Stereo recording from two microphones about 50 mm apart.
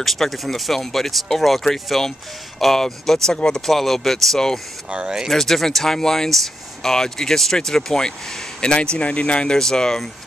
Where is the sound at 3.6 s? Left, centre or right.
Centre.